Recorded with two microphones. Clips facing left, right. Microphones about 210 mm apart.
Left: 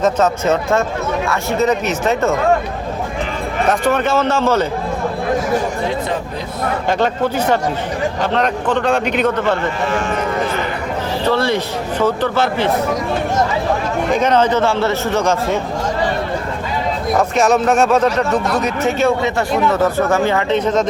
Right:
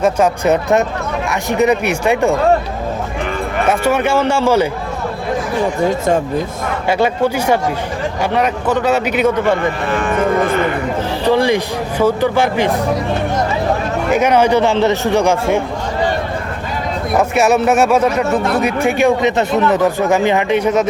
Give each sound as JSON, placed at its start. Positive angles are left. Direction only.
{"t": 0.0, "sound": "speech", "side_deg": -15}
{"t": 3.7, "sound": "speech", "side_deg": -10}
{"t": 5.8, "sound": "speech", "side_deg": -45}
{"t": 6.8, "sound": "speech", "side_deg": -10}
{"t": 11.3, "sound": "speech", "side_deg": -15}
{"t": 14.1, "sound": "speech", "side_deg": -10}
{"t": 17.2, "sound": "speech", "side_deg": -10}